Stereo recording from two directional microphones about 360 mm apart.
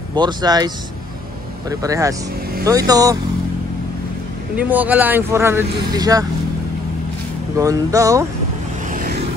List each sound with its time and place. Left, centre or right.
0.1 s speech: centre
1.7 s speech: centre
4.6 s speech: centre
7.5 s speech: centre
8.9 s vehicle: right